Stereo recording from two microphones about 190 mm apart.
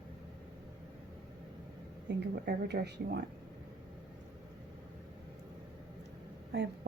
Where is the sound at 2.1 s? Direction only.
65° right (ahead or behind).